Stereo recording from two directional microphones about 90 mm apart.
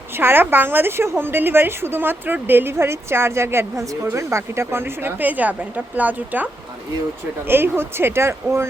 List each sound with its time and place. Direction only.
0.1 s a woman's voice: 25° right (ahead or behind)